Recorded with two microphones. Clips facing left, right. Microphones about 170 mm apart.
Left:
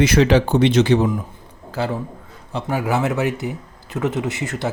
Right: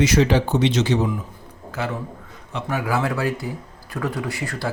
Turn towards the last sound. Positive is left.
turn(degrees=20)  # may be behind; listen again after turning